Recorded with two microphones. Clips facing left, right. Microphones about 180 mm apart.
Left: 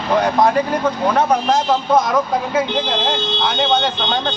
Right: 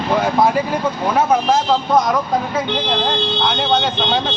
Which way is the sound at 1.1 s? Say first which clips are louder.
Right 4 dB; centre (ahead or behind).